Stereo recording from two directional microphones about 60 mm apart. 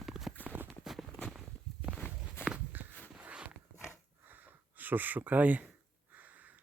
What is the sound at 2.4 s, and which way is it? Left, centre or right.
Walk, left.